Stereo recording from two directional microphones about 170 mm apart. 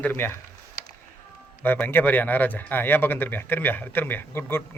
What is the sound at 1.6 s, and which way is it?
Speech, 10° left (ahead or behind).